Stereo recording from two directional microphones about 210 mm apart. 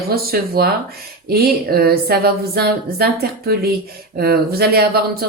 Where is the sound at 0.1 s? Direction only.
45° right (ahead or behind).